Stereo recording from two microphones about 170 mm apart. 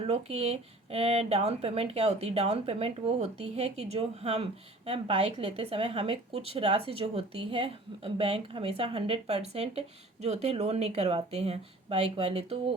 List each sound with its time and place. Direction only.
0.0 s speech: 35° right (ahead or behind)